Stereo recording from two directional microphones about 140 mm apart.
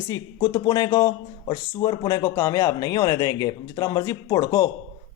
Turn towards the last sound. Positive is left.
turn(degrees=25)  # may be behind; listen again after turning